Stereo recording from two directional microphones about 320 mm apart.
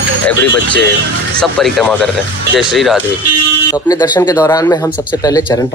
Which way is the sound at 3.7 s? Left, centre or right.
Centre.